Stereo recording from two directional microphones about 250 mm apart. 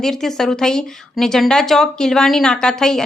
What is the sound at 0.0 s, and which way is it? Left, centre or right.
A woman's voice, centre.